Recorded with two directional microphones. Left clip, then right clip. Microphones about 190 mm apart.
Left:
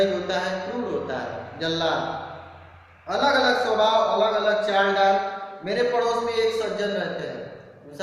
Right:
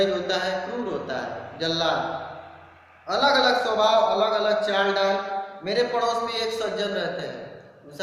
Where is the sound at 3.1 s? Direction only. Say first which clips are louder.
Even; 15° right (ahead or behind).